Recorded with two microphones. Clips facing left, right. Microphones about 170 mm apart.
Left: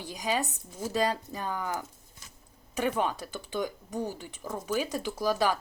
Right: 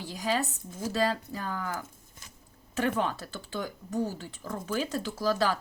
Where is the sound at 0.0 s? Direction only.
15° left (ahead or behind).